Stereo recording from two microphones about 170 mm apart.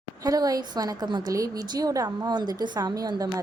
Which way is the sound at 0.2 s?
20° right (ahead or behind).